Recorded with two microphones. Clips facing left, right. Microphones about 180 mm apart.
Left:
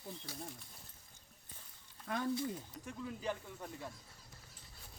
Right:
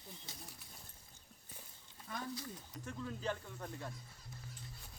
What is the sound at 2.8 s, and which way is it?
Speech, 10° left (ahead or behind).